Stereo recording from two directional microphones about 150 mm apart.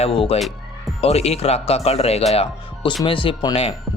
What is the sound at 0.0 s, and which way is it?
Speech, 40° left (ahead or behind).